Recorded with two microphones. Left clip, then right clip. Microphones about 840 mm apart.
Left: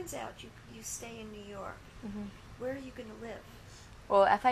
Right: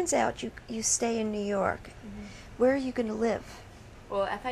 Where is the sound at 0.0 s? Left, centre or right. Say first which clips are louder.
Right 14 dB; right.